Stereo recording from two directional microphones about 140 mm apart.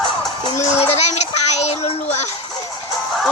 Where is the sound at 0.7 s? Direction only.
50° left (ahead or behind).